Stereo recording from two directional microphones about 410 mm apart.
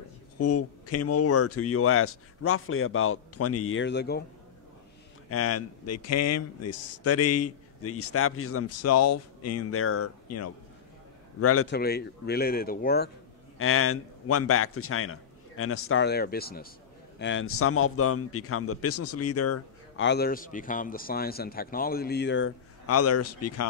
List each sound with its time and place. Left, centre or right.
0.4 s a man's voice: left
5.3 s a man's voice: left